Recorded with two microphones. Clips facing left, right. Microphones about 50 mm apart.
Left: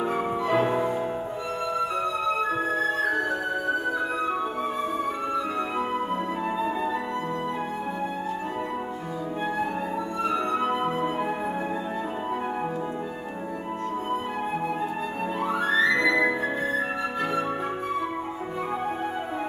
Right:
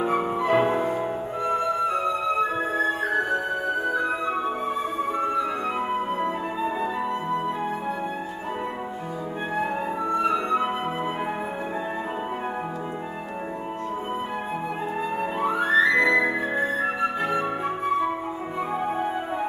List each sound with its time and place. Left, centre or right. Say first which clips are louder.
0.0 s music: right 2 dB; centre
10.3 s music: right 1 dB; centre
15.5 s music: right 3 dB; centre